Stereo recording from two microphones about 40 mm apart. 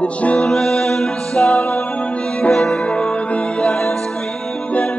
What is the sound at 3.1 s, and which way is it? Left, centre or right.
Music, left.